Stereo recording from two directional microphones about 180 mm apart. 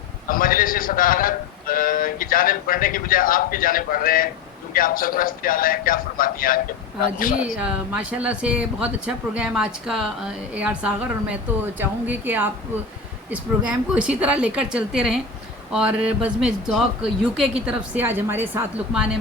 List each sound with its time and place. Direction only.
0.3 s a man's voice: 50° left (ahead or behind)
7.6 s speech: 5° right (ahead or behind)